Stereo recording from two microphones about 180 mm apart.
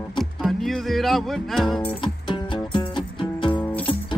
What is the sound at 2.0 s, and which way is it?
Music, 25° left (ahead or behind).